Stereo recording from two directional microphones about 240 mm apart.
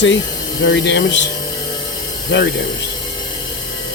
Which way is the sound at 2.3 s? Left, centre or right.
Left.